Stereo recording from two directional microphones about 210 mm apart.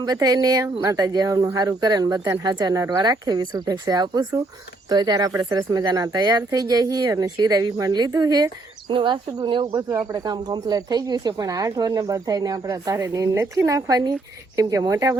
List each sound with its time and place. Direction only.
0.0 s speech: 15° right (ahead or behind)